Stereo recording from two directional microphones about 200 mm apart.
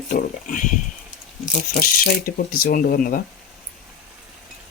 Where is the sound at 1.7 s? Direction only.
45° left (ahead or behind).